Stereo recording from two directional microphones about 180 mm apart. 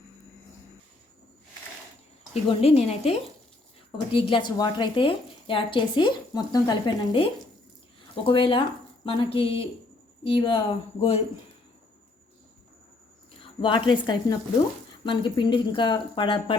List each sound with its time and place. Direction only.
2.3 s a woman's voice: 35° left (ahead or behind)
13.4 s a woman's voice: 25° left (ahead or behind)